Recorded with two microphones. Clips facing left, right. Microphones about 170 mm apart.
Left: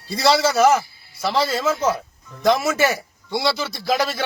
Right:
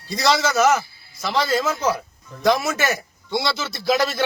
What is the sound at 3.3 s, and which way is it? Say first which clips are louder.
Speech: left 2 dB; 5° left (ahead or behind).